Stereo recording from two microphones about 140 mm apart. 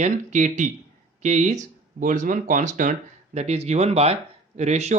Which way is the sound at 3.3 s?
50° right (ahead or behind).